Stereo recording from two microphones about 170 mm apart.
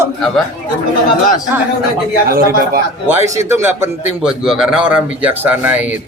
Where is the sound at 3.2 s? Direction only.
15° right (ahead or behind).